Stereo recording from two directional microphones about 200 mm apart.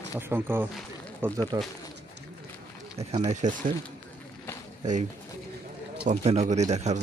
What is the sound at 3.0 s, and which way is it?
Speech, 30° right (ahead or behind).